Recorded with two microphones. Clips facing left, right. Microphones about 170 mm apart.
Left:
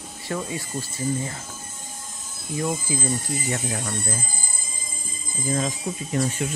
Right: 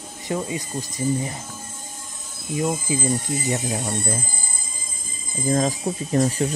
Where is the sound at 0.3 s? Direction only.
20° right (ahead or behind).